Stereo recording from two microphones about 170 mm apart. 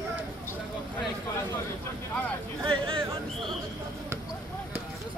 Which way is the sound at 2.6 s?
30° right (ahead or behind).